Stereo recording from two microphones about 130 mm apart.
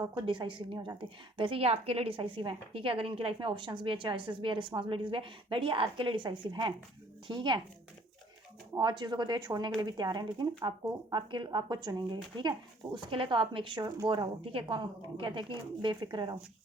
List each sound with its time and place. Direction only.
0.2 s speech: 35° right (ahead or behind)
8.8 s speech: 35° right (ahead or behind)